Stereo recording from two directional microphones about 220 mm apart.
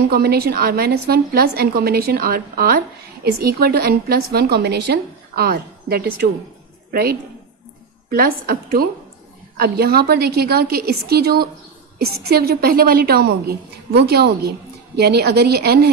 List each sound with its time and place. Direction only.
0.1 s a woman's voice: 45° right (ahead or behind)